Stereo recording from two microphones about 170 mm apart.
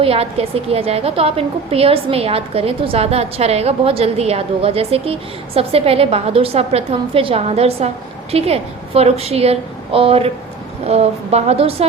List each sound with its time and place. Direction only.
0.0 s a woman's voice: 35° right (ahead or behind)